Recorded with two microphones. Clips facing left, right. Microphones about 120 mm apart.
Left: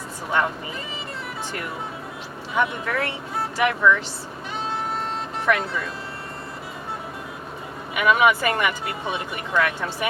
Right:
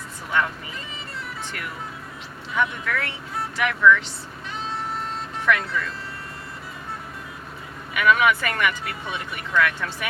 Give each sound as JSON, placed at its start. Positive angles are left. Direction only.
{"t": 0.3, "sound": "speech", "side_deg": 30}
{"t": 2.6, "sound": "speech", "side_deg": 30}
{"t": 5.5, "sound": "speech", "side_deg": 30}
{"t": 8.1, "sound": "speech", "side_deg": 30}